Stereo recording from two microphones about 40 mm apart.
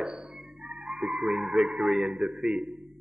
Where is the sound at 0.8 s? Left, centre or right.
Centre.